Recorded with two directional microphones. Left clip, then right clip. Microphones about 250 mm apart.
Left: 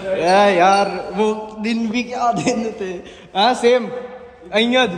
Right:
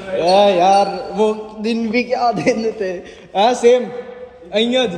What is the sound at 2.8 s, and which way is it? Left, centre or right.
A man's voice, right.